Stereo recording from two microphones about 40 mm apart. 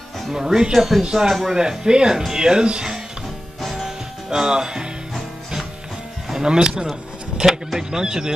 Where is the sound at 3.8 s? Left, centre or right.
Centre.